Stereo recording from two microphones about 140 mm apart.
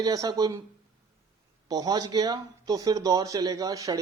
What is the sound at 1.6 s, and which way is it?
Speech, 30° right (ahead or behind).